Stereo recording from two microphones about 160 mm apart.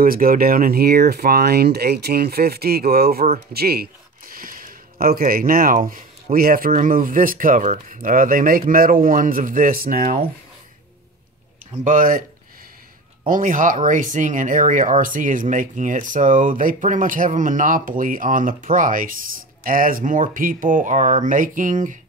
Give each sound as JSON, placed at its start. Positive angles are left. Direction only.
{"t": 0.0, "sound": "speech", "side_deg": -65}
{"t": 11.8, "sound": "speech", "side_deg": -55}
{"t": 13.3, "sound": "speech", "side_deg": -55}